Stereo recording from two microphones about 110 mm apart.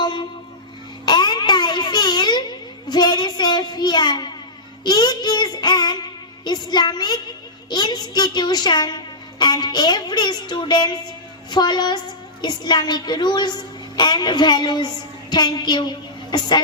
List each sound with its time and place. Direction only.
0.0 s music: 45° left (ahead or behind)
1.0 s a sound: 40° left (ahead or behind)
4.8 s child singing: 40° left (ahead or behind)
7.7 s a woman's voice: 40° left (ahead or behind)